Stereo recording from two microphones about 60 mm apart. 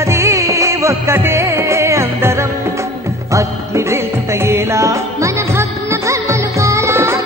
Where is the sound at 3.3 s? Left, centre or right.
Right.